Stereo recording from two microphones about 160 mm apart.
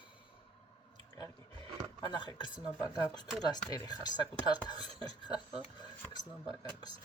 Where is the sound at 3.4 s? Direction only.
25° left (ahead or behind).